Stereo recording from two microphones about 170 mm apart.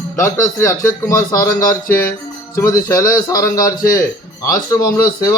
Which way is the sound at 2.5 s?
20° left (ahead or behind).